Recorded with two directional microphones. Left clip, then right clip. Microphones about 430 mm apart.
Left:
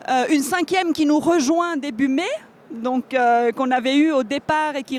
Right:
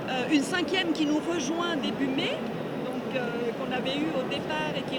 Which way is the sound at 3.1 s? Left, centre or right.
Left.